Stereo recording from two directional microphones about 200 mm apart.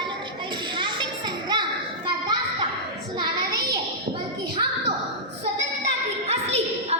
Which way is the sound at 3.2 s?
20° right (ahead or behind).